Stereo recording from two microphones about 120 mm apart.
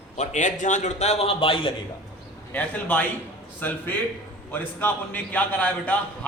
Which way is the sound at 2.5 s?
15° left (ahead or behind).